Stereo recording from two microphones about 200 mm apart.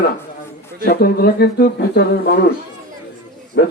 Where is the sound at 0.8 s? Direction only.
50° left (ahead or behind).